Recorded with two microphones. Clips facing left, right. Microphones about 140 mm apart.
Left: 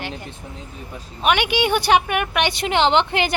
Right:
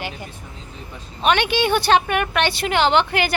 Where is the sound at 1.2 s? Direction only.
10° left (ahead or behind).